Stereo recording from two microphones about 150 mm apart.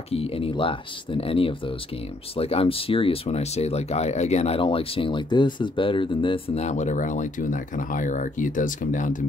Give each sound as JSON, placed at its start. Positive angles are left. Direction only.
{"t": 0.1, "sound": "speech", "side_deg": 40}